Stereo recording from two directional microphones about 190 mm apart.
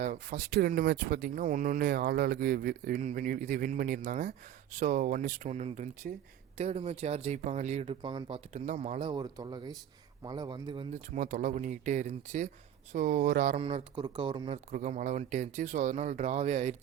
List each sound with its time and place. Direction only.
0.0 s speech: 40° right (ahead or behind); by 10.8 s 25° right (ahead or behind)
10.9 s speech: 40° right (ahead or behind)
13.6 s speech: 30° right (ahead or behind)
14.7 s speech: 40° right (ahead or behind)